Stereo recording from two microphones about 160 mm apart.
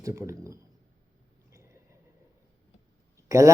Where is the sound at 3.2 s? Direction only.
20° right (ahead or behind).